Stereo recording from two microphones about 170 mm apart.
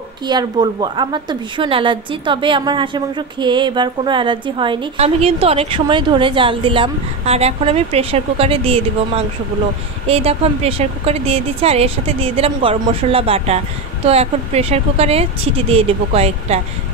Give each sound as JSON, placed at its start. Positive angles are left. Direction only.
{"t": 0.3, "sound": "a woman's voice", "side_deg": -25}